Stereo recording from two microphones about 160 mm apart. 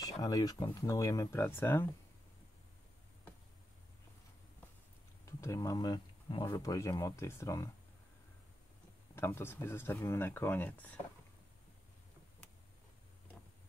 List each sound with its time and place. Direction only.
0.0 s speech: 25° left (ahead or behind)
5.2 s speech: 20° left (ahead or behind)
9.1 s speech: 15° left (ahead or behind)